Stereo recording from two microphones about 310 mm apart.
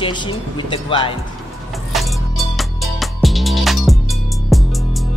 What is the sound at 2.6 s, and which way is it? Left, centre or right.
Music, centre.